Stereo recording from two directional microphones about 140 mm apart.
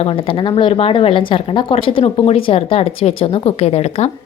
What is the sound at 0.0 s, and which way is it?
A woman's voice, 40° left (ahead or behind).